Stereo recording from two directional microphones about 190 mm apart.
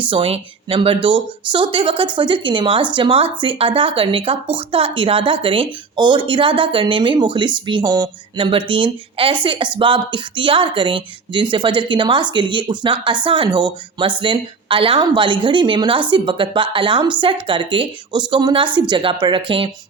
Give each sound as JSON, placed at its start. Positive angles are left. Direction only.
{"t": 0.1, "sound": "speech", "side_deg": -30}